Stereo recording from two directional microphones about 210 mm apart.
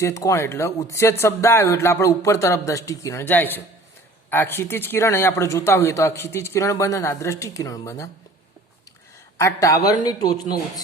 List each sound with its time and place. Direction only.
0.0 s speech: 15° left (ahead or behind)
9.4 s speech: 15° left (ahead or behind)